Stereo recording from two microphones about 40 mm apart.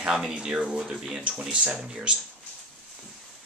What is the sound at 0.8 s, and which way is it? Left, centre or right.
Speech, centre.